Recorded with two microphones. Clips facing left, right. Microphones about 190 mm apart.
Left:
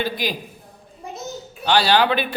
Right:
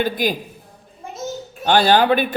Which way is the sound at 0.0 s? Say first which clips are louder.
Right 4 dB; 50° right (ahead or behind).